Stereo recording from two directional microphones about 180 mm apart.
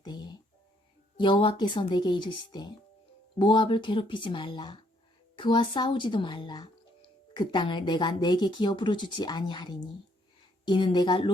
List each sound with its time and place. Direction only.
0.0 s music: 25° left (ahead or behind)
1.2 s a woman's voice: 25° left (ahead or behind)